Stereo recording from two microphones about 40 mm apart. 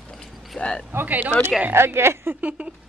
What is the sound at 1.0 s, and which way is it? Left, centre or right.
Speech, right.